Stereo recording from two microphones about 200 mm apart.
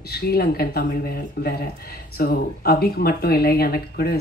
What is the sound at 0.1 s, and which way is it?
Speech, 50° left (ahead or behind).